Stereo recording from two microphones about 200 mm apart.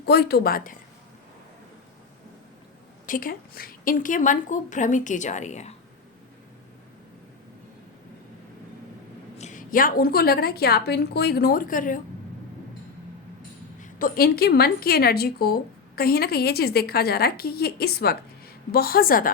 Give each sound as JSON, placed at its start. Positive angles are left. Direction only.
{"t": 0.0, "sound": "a woman's voice", "side_deg": 55}
{"t": 3.1, "sound": "a woman's voice", "side_deg": 45}
{"t": 9.4, "sound": "a woman's voice", "side_deg": 40}
{"t": 13.8, "sound": "a woman's voice", "side_deg": 45}